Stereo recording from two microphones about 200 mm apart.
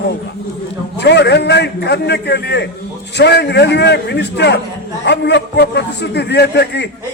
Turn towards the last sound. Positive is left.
turn(degrees=55)  # may be behind; listen again after turning